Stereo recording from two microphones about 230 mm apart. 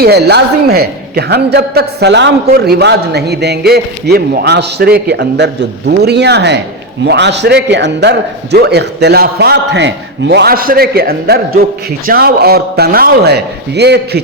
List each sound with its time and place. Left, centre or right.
0.0 s a man's voice: right